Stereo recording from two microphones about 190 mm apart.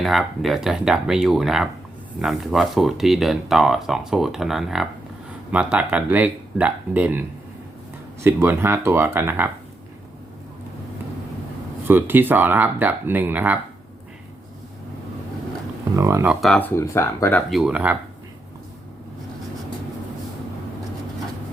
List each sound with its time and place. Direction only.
0.0 s speech: centre (ahead or behind)
11.9 s speech: 10° right (ahead or behind)
16.0 s speech: 15° right (ahead or behind)
16.5 s speech: 10° left (ahead or behind)
17.5 s speech: 5° right (ahead or behind)